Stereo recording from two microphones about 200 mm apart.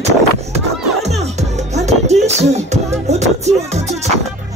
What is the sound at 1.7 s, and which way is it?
Music, 35° right (ahead or behind).